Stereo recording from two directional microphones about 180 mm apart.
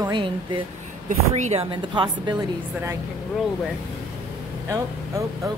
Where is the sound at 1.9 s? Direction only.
25° right (ahead or behind).